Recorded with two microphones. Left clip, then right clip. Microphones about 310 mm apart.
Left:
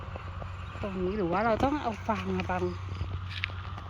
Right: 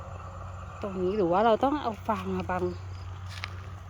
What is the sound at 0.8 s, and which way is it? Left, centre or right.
Speech, centre.